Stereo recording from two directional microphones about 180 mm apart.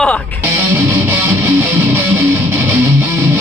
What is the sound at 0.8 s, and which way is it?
Music, 10° right (ahead or behind).